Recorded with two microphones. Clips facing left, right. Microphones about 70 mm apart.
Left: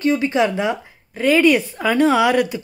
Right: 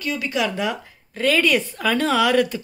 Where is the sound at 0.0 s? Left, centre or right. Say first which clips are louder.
Left 7 dB; left.